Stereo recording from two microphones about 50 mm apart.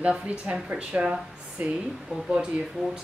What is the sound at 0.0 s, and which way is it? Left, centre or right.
Speech, right.